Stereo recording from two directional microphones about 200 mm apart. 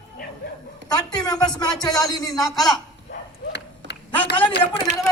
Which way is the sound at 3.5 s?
60° left (ahead or behind).